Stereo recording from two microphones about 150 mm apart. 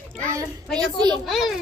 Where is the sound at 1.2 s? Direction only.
Centre (ahead or behind).